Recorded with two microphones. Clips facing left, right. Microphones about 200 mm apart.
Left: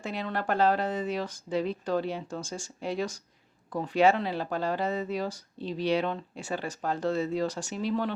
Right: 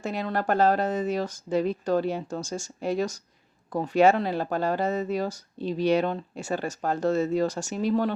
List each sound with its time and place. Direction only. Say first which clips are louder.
0.0 s speech: right 4 dB; 45° right (ahead or behind)